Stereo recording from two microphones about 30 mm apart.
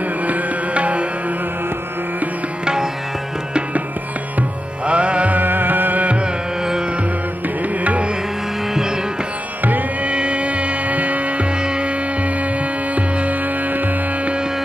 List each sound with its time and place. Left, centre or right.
0.2 s music: right
2.6 s music: right
4.8 s music: right
5.3 s music: right
9.6 s music: right
10.0 s music: right
11.6 s music: right
12.9 s music: right